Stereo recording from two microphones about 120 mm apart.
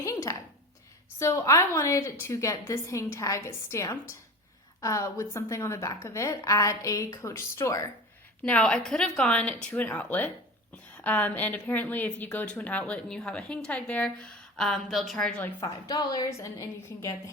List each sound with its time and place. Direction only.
0.0 s a sound: 25° left (ahead or behind)
1.2 s a woman's voice: 25° left (ahead or behind)
8.4 s a woman's voice: 10° left (ahead or behind)
15.6 s a woman's voice: 30° left (ahead or behind)